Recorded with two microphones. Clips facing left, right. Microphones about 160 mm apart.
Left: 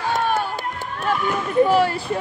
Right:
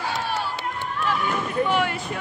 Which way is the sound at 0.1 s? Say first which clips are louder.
Left 6 dB; 50° left (ahead or behind).